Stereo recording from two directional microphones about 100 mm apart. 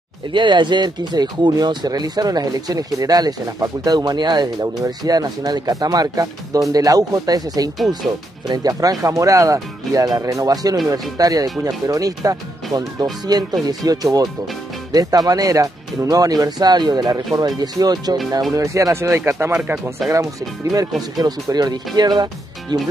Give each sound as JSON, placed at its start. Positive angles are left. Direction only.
{"t": 0.3, "sound": "speech", "side_deg": -50}
{"t": 19.5, "sound": "speech", "side_deg": -10}
{"t": 20.7, "sound": "speech", "side_deg": -40}